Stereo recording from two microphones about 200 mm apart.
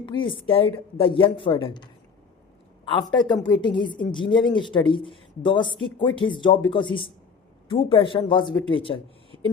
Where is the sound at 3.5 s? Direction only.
25° left (ahead or behind).